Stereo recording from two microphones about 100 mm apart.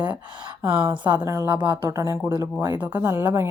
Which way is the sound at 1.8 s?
35° right (ahead or behind).